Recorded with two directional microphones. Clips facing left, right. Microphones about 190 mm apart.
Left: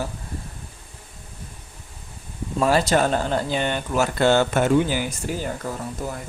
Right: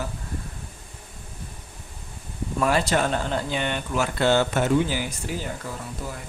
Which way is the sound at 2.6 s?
35° left (ahead or behind).